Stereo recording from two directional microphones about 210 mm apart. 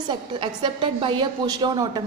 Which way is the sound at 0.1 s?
20° right (ahead or behind).